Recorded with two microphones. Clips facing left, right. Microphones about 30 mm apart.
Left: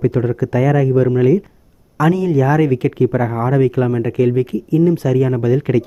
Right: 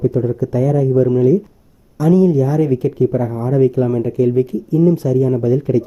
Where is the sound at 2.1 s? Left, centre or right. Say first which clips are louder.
Right 4 dB; left.